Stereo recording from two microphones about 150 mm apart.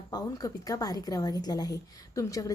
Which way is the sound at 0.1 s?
25° left (ahead or behind).